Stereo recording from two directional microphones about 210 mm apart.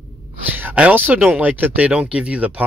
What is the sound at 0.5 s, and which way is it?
Speech, 5° right (ahead or behind).